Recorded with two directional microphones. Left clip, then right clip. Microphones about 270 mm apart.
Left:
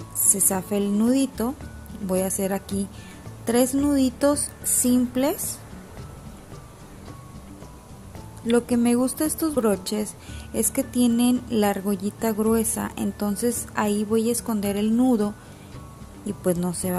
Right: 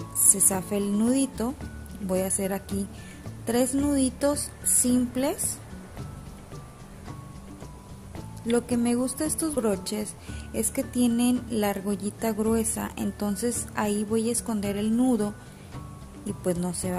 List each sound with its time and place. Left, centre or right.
0.3 s a woman's voice: centre
8.5 s a woman's voice: centre